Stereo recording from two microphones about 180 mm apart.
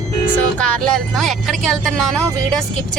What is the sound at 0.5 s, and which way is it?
Speech, 5° left (ahead or behind).